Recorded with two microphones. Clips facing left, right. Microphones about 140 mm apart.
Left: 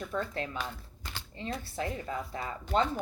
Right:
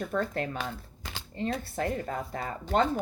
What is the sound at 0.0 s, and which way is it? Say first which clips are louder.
Speech: right 4 dB; 50° right (ahead or behind).